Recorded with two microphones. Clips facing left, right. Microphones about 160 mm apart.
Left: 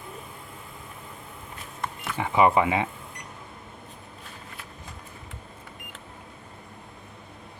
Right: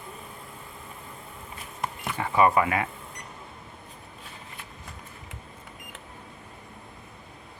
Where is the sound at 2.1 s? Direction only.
15° left (ahead or behind).